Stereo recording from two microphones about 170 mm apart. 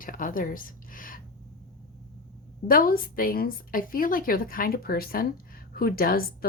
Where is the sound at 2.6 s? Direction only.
55° left (ahead or behind).